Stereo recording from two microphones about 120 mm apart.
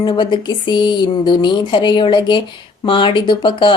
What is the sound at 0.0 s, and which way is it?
Speech, 40° left (ahead or behind).